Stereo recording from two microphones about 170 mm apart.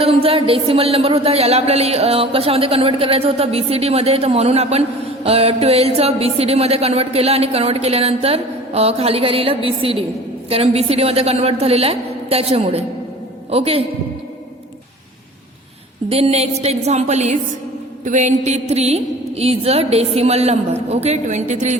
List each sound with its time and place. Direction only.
0.0 s speech: 35° right (ahead or behind)
16.0 s speech: 35° right (ahead or behind)